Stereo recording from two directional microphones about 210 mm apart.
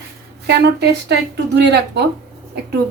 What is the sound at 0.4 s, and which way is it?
A woman's voice, 50° right (ahead or behind).